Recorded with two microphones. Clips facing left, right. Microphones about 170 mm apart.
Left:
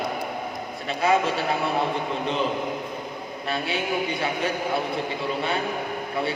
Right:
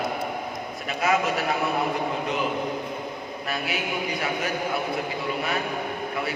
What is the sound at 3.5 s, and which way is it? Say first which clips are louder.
A man's voice: left 3 dB; 30° left (ahead or behind).